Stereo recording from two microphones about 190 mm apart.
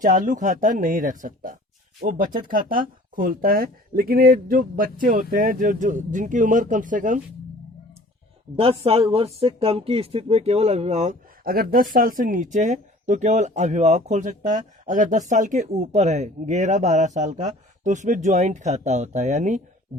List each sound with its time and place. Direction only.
0.0 s speech: 45° right (ahead or behind)
8.5 s speech: 30° right (ahead or behind)